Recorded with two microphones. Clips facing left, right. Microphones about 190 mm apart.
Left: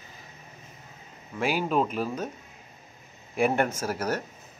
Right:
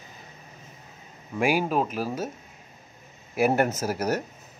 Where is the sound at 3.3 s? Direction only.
5° right (ahead or behind).